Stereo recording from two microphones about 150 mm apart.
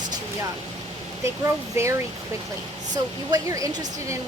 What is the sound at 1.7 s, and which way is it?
Speech, 20° right (ahead or behind).